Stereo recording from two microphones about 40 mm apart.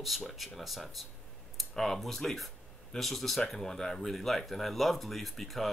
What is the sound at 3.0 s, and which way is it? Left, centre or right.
Mantra, centre.